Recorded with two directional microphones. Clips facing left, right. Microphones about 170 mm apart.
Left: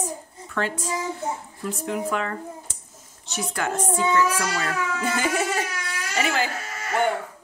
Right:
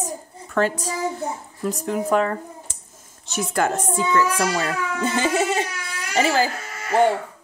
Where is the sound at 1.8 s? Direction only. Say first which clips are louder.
Right 6 dB; 40° right (ahead or behind).